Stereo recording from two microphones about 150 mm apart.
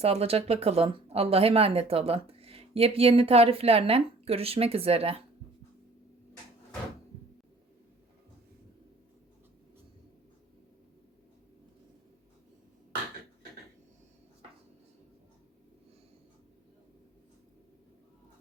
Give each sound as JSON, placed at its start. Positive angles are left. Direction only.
{"t": 0.0, "sound": "speech", "side_deg": -40}